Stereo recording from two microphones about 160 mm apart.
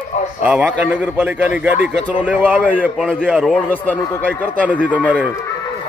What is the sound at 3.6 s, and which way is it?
Speech, 10° left (ahead or behind).